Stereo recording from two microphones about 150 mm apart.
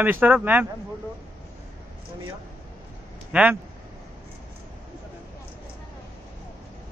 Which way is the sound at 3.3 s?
10° right (ahead or behind).